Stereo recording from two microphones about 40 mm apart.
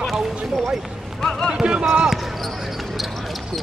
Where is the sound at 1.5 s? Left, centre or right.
Right.